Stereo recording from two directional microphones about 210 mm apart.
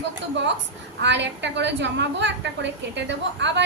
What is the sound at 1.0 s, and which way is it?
A woman's voice, 55° right (ahead or behind).